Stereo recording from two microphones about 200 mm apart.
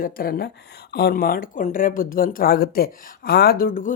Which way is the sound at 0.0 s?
45° left (ahead or behind).